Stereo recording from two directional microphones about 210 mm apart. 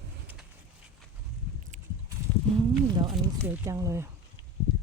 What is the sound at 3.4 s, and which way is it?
Speech, 10° right (ahead or behind).